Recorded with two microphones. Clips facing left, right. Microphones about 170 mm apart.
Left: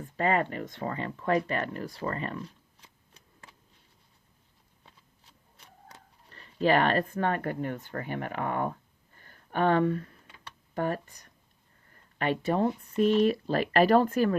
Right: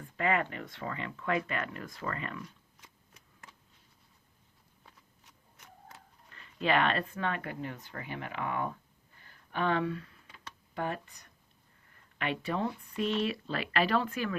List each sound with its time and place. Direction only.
0.0 s speech: 35° left (ahead or behind)
5.6 s tick-tock: 30° left (ahead or behind)
6.2 s speech: 35° left (ahead or behind)
9.2 s a sound: 45° left (ahead or behind)
10.8 s speech: 45° left (ahead or behind)
11.9 s a sound: 40° left (ahead or behind)
13.0 s speech: 45° left (ahead or behind)